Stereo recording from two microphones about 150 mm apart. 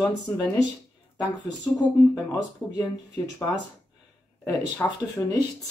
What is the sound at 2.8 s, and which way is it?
Speech, 25° left (ahead or behind).